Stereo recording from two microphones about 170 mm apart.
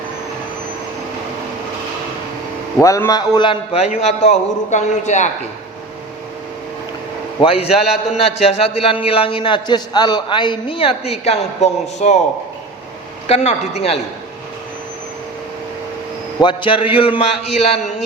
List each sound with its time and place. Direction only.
2.8 s a man's voice: 20° left (ahead or behind); by 5.3 s 45° left (ahead or behind)
7.4 s a man's voice: 35° left (ahead or behind)
13.2 s a man's voice: 35° left (ahead or behind)
16.4 s a man's voice: 30° left (ahead or behind)